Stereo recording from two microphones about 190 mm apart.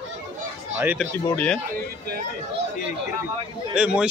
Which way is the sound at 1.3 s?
5° left (ahead or behind).